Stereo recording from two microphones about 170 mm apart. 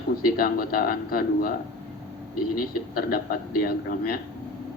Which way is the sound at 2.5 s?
60° left (ahead or behind).